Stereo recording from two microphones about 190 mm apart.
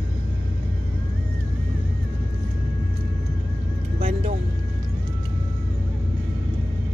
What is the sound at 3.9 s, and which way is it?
Music, 30° right (ahead or behind).